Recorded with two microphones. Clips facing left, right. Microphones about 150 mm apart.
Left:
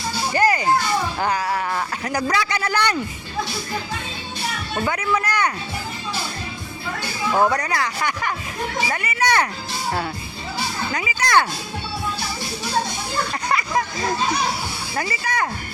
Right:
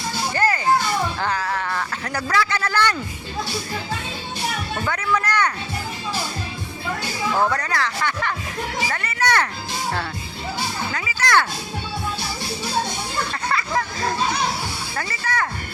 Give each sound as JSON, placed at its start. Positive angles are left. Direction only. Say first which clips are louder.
{"t": 0.3, "sound": "music", "louder": "left 3 dB", "side_deg": 15}
{"t": 1.2, "sound": "speech", "louder": "left 2 dB", "side_deg": 15}
{"t": 4.9, "sound": "speech", "louder": "even", "side_deg": 10}
{"t": 7.3, "sound": "speech", "louder": "left 3 dB", "side_deg": 15}
{"t": 8.9, "sound": "children playing", "louder": "left 1 dB", "side_deg": 10}
{"t": 10.9, "sound": "speech", "louder": "left 2 dB", "side_deg": 15}
{"t": 13.5, "sound": "a sound", "louder": "left 2 dB", "side_deg": 15}
{"t": 14.9, "sound": "speech", "louder": "left 2 dB", "side_deg": 15}